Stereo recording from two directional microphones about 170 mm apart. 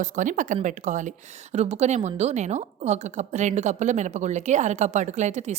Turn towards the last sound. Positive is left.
turn(degrees=-45)  # may be behind; listen again after turning